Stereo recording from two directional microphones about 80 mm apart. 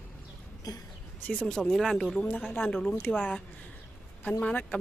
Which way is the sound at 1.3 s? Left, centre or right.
Centre.